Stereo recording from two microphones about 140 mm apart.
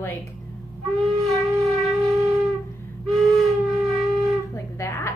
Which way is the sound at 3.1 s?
Centre (ahead or behind).